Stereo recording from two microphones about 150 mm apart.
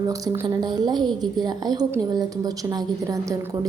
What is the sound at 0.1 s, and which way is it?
A woman's voice, 30° right (ahead or behind).